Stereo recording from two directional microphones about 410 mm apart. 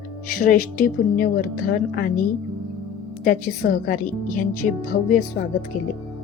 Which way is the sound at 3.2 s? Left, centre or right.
Centre.